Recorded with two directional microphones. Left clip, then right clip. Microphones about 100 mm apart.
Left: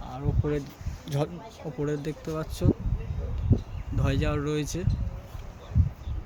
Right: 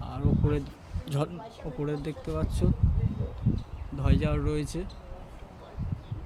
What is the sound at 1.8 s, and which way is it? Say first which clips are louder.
Speech: left 3 dB; 15° left (ahead or behind).